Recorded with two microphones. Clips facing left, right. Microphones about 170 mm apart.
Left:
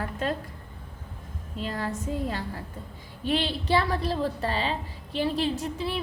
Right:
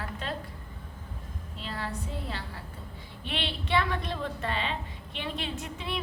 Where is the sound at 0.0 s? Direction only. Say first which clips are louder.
Left 7 dB; 45° left (ahead or behind).